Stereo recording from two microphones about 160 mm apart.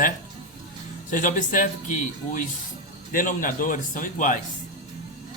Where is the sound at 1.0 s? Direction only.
55° left (ahead or behind).